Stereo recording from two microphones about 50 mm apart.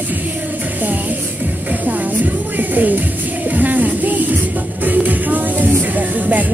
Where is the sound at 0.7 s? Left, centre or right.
Right.